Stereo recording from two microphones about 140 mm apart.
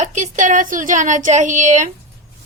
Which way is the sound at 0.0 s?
60° right (ahead or behind).